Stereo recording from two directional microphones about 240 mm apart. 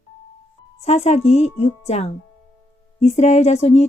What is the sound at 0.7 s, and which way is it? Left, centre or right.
A woman's voice, left.